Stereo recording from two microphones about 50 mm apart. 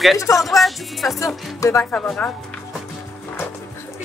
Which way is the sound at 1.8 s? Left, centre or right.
Left.